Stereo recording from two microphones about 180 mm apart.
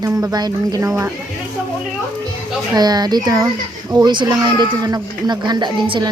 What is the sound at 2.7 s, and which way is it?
Speech, 20° right (ahead or behind).